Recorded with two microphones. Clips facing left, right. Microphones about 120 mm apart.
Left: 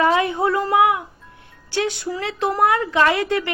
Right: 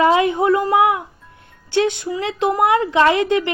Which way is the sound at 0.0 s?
20° right (ahead or behind).